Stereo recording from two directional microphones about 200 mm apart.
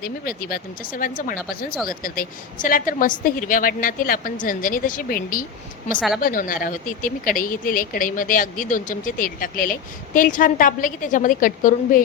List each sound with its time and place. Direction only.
0.0 s a woman's voice: 50° left (ahead or behind)